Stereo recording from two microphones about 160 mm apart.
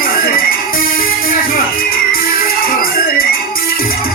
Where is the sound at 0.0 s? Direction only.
65° left (ahead or behind).